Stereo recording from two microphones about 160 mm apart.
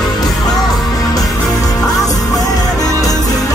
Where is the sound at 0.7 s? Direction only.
25° left (ahead or behind).